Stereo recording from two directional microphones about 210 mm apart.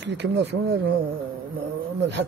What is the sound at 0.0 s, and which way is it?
Speech, 55° right (ahead or behind).